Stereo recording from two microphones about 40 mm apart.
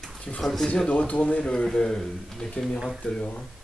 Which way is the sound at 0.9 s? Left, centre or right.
Left.